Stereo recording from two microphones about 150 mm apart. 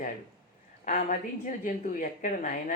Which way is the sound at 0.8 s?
60° left (ahead or behind).